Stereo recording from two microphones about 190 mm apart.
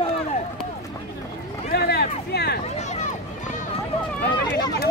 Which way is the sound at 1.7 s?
55° left (ahead or behind).